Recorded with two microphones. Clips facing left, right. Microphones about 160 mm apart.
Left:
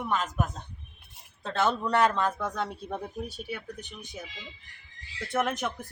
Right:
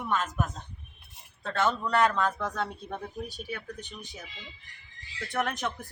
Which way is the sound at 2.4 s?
Centre (ahead or behind).